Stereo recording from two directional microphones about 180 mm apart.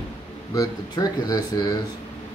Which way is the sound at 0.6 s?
20° left (ahead or behind).